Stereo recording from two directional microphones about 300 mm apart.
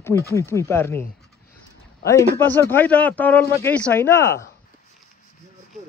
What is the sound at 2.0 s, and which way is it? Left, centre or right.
Speech, centre.